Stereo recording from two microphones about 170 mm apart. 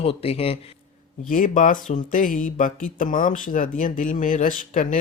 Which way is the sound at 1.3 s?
50° left (ahead or behind).